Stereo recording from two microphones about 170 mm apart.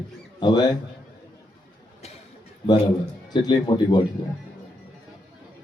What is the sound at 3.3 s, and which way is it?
Speech, 25° left (ahead or behind).